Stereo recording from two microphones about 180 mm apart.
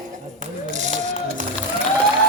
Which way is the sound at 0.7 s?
40° right (ahead or behind).